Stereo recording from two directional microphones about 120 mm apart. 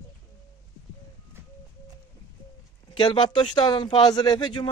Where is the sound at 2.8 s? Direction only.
40° left (ahead or behind).